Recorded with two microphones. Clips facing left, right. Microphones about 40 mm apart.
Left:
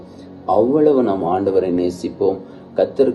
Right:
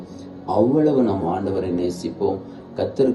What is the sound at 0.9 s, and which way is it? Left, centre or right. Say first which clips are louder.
Speech: left 3 dB; left.